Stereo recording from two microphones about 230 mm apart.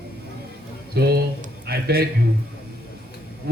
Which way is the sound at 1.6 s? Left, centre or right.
Right.